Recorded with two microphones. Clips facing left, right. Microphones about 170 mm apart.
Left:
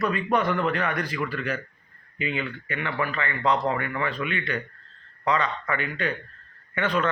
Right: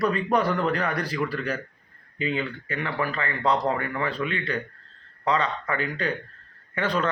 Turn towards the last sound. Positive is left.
turn(degrees=-35)  # may be behind; listen again after turning